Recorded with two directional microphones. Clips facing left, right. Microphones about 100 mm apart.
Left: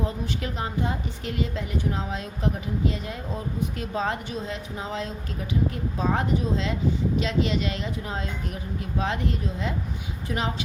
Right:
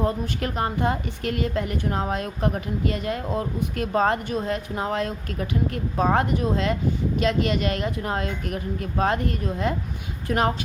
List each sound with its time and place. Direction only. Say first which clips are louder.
0.0 s a woman's voice: right 4 dB; 55° right (ahead or behind)